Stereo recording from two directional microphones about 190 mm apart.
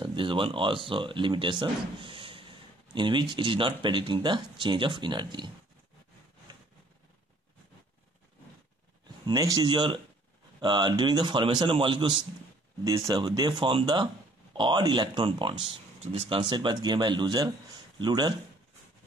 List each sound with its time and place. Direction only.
0.0 s speech: 25° right (ahead or behind)
6.5 s vehicle: 25° right (ahead or behind)
9.2 s speech: 20° right (ahead or behind)